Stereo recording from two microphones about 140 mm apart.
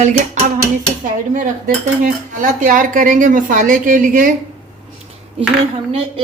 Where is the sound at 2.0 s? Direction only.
70° right (ahead or behind).